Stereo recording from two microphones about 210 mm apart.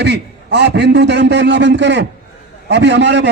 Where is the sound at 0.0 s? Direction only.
55° right (ahead or behind).